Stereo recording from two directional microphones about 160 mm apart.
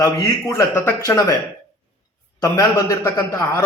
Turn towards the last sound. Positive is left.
turn(degrees=20)  # may be behind; listen again after turning